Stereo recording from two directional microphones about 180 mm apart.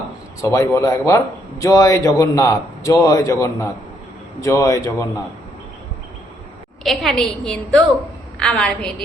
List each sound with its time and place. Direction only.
0.4 s a man's voice: 15° left (ahead or behind)
6.8 s a woman's voice: centre (ahead or behind)